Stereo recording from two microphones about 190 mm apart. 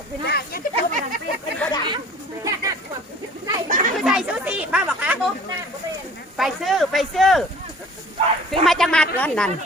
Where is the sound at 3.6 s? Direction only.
45° right (ahead or behind).